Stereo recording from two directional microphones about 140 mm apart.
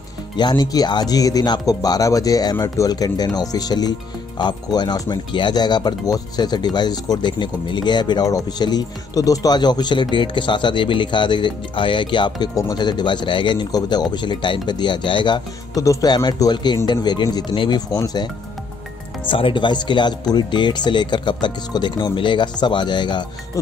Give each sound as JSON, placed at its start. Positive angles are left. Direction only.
{"t": 0.4, "sound": "speech", "side_deg": 30}